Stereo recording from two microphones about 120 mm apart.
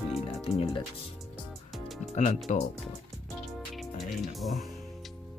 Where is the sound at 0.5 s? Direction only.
55° left (ahead or behind).